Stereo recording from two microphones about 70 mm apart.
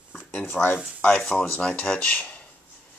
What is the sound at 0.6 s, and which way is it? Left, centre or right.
Speech, centre.